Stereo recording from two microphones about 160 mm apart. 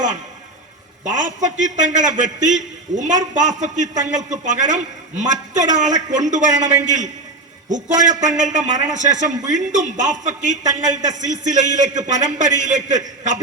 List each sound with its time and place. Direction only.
1.0 s a man's voice: 50° right (ahead or behind)